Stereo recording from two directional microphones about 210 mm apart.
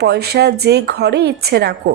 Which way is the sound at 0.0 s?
50° right (ahead or behind).